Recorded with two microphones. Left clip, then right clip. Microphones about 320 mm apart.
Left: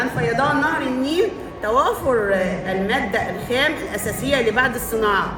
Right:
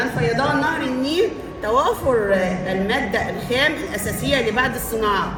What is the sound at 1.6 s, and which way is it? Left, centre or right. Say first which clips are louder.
A woman's voice: even; centre.